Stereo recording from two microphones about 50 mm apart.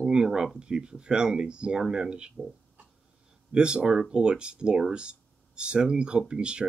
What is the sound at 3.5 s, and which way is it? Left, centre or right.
Speech, centre.